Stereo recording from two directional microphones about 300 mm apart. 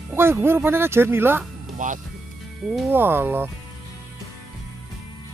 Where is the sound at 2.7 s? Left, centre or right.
Centre.